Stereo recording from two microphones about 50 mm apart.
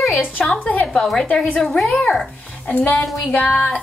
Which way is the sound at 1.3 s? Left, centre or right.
Left.